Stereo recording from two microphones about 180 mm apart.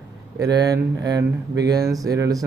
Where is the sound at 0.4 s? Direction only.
20° right (ahead or behind).